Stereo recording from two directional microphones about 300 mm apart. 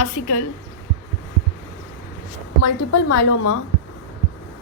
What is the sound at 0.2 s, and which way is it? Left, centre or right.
Speech, left.